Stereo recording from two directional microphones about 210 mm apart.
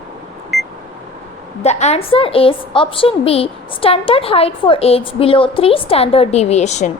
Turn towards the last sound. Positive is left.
turn(degrees=30)  # may be behind; listen again after turning